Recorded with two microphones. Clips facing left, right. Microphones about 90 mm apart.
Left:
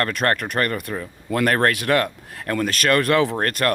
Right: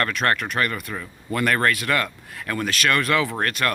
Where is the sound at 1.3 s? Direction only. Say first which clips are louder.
Left 2 dB; 55° left (ahead or behind).